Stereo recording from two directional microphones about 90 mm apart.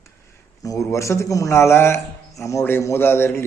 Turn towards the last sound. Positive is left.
turn(degrees=25)  # may be behind; listen again after turning